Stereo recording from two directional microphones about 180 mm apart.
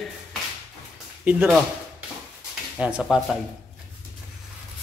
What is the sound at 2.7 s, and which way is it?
Speech, 5° right (ahead or behind).